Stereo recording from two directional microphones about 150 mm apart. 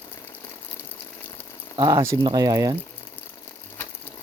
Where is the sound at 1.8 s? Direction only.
25° right (ahead or behind).